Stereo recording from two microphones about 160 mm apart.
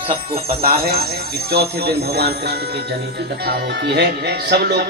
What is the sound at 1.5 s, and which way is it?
Speech, 90° right.